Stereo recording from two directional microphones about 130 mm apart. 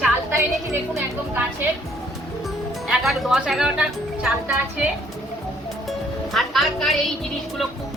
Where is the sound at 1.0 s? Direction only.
15° right (ahead or behind).